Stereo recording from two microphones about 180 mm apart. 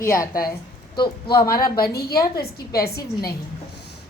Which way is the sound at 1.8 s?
55° left (ahead or behind).